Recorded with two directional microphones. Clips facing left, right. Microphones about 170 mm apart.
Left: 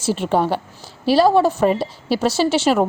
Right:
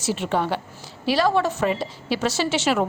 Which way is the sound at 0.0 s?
35° left (ahead or behind).